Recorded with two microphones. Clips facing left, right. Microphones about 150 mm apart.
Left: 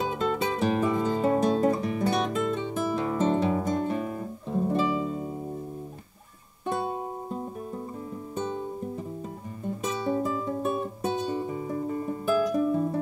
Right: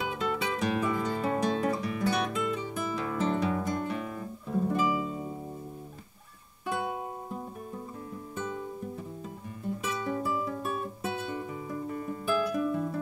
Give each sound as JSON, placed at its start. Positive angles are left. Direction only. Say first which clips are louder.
{"t": 0.5, "sound": "music", "louder": "left 3 dB", "side_deg": 30}
{"t": 1.8, "sound": "music", "louder": "left 4 dB", "side_deg": 45}
{"t": 2.0, "sound": "music", "louder": "left 3 dB", "side_deg": 25}
{"t": 2.6, "sound": "guitar", "louder": "left 5 dB", "side_deg": 25}
{"t": 4.5, "sound": "music", "louder": "left 2 dB", "side_deg": 30}
{"t": 8.4, "sound": "music", "louder": "left 5 dB", "side_deg": 25}
{"t": 9.9, "sound": "music", "louder": "left 5 dB", "side_deg": 30}